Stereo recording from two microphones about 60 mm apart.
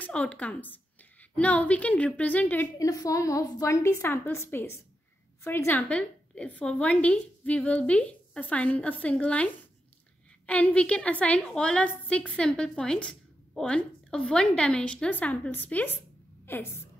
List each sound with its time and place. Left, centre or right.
0.1 s a woman's voice: centre
2.8 s a woman's voice: left
5.9 s a woman's voice: centre; by 16.6 s left